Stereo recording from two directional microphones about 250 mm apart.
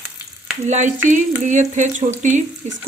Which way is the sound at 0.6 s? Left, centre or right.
Right.